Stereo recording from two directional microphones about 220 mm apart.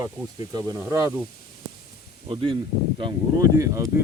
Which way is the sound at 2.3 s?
25° right (ahead or behind).